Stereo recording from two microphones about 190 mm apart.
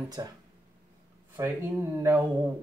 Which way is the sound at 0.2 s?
15° right (ahead or behind).